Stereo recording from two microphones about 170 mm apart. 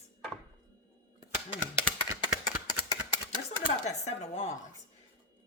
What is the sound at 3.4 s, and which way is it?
Speech, 40° left (ahead or behind).